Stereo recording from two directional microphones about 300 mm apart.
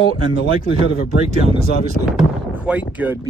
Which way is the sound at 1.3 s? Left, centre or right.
Right.